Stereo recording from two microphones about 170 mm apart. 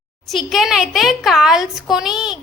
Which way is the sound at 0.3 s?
Centre (ahead or behind).